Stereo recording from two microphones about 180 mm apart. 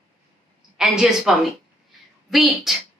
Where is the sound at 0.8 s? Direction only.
5° right (ahead or behind).